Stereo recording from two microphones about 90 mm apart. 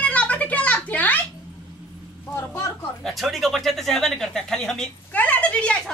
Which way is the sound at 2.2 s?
30° left (ahead or behind).